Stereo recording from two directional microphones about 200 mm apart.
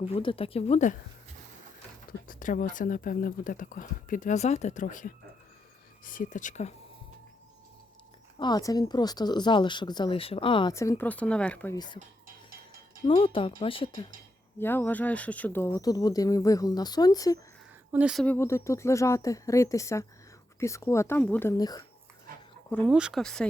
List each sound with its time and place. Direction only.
0.1 s speech: 25° left (ahead or behind)
2.2 s speech: 40° left (ahead or behind)
8.4 s speech: 20° left (ahead or behind)
13.1 s speech: 25° left (ahead or behind)
14.6 s speech: 10° left (ahead or behind)
17.9 s speech: 5° right (ahead or behind)
18.3 s speech: 15° left (ahead or behind)
22.9 s speech: 5° right (ahead or behind)